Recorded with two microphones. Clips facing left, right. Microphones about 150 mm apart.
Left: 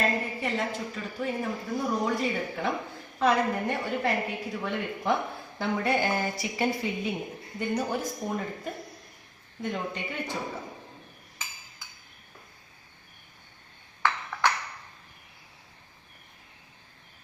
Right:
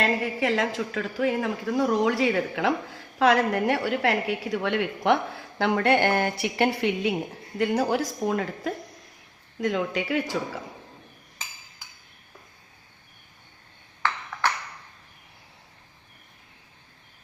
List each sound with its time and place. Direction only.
0.0 s a woman's voice: 90° right
7.6 s a woman's voice: 90° right